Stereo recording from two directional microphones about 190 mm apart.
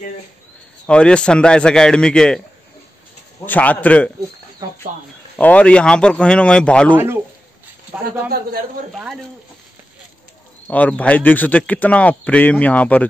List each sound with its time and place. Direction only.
0.8 s a man's voice: 5° left (ahead or behind)
3.4 s speech: 10° left (ahead or behind)
4.6 s a sound: 20° right (ahead or behind)
5.4 s a man's voice: 5° left (ahead or behind)
8.0 s speech: 50° right (ahead or behind)
8.9 s a man's voice: centre (ahead or behind)
10.7 s speech: 10° left (ahead or behind)